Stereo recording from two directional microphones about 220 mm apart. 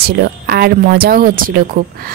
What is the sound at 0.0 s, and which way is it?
Speech, 45° right (ahead or behind).